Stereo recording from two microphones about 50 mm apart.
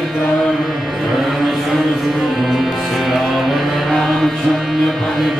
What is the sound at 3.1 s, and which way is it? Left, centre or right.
Music, centre.